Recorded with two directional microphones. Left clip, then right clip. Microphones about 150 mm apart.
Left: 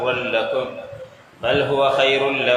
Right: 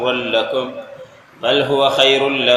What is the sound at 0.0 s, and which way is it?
Speech, 35° right (ahead or behind).